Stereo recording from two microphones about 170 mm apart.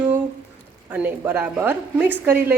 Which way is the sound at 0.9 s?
10° right (ahead or behind).